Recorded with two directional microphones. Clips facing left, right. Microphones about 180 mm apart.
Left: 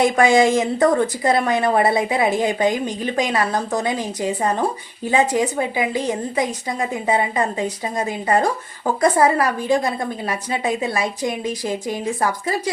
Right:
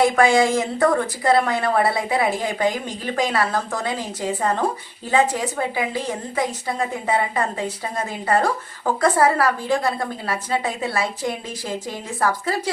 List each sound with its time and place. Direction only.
0.0 s a woman's voice: 20° left (ahead or behind)